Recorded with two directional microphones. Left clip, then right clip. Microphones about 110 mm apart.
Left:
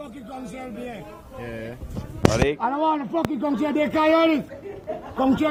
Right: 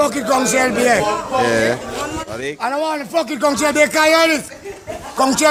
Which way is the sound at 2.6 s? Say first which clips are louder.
Right 3 dB; 70° right (ahead or behind).